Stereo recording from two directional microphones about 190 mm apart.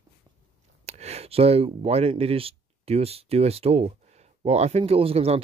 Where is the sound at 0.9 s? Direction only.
35° right (ahead or behind).